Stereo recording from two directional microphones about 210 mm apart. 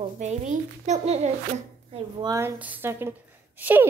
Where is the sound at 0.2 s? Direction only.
35° right (ahead or behind).